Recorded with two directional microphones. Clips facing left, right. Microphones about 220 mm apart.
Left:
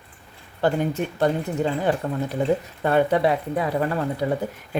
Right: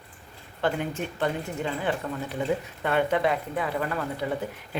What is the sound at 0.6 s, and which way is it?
Speech, 40° left (ahead or behind).